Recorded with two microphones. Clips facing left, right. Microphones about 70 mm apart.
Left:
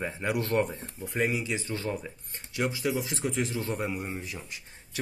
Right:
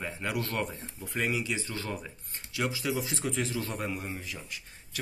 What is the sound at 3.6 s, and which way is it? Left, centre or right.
Speech, centre.